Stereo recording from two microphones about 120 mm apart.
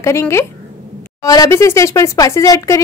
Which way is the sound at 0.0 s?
25° left (ahead or behind).